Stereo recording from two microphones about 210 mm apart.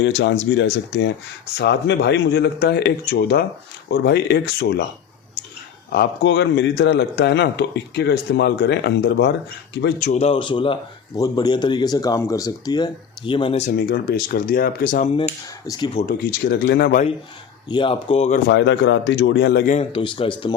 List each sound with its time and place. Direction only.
0.0 s a man's voice: 60° left (ahead or behind)
5.9 s speech: 50° left (ahead or behind)
10.0 s speech: 30° left (ahead or behind)
13.7 s speech: 50° left (ahead or behind)
15.1 s speech: 25° left (ahead or behind)
16.0 s speech: 45° left (ahead or behind)
17.7 s speech: 25° left (ahead or behind)
18.4 s a man's voice: 55° left (ahead or behind)
19.7 s speech: 25° left (ahead or behind)